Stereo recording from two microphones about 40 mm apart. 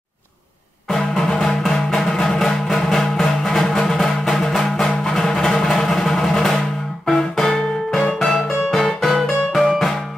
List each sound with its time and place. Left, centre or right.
0.8 s music: centre
8.3 s music: centre